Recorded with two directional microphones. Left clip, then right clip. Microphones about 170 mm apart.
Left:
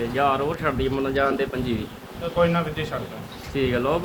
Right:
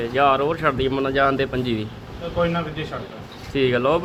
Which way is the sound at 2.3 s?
5° right (ahead or behind).